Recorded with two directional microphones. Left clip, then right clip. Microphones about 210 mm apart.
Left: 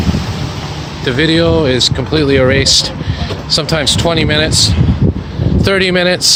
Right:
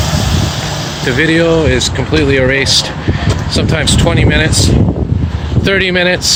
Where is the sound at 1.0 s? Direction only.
15° left (ahead or behind).